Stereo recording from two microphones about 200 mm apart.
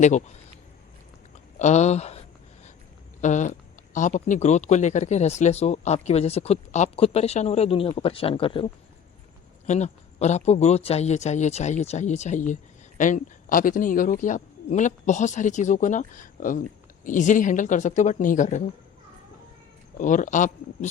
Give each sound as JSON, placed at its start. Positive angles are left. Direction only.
{"t": 0.0, "sound": "speech", "side_deg": 35}
{"t": 1.5, "sound": "speech", "side_deg": 35}
{"t": 20.0, "sound": "speech", "side_deg": 40}